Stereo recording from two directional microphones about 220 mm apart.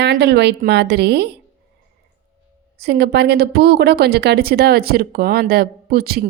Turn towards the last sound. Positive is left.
turn(degrees=-45)  # may be behind; listen again after turning